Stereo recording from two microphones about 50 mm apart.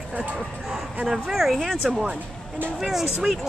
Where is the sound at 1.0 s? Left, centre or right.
Centre.